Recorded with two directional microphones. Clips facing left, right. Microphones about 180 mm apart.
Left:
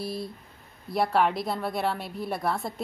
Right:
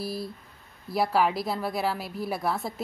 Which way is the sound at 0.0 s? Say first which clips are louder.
Even; centre (ahead or behind).